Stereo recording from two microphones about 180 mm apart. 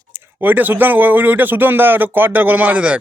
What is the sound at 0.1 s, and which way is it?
Speech, 15° right (ahead or behind).